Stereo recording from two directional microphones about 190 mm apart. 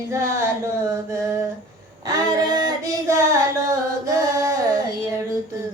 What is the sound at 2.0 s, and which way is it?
Female singing, 20° right (ahead or behind).